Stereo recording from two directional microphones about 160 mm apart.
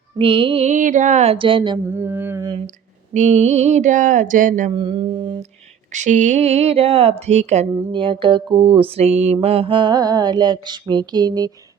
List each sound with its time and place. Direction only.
0.2 s speech: 35° right (ahead or behind)
0.7 s speech: 50° right (ahead or behind); by 1.8 s 30° right (ahead or behind)
1.9 s mantra: 15° right (ahead or behind)
3.1 s a sound: 45° right (ahead or behind)
4.7 s speech: 35° right (ahead or behind)
5.9 s speech: 50° right (ahead or behind); by 8.4 s 30° right (ahead or behind)
8.6 s mantra: 35° right (ahead or behind)